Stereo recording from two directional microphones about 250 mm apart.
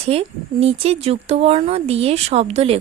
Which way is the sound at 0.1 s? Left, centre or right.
Right.